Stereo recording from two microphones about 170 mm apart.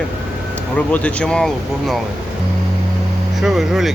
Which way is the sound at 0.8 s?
10° left (ahead or behind).